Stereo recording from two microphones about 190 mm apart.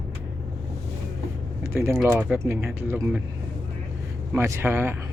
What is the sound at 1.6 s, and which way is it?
Speech, 15° right (ahead or behind).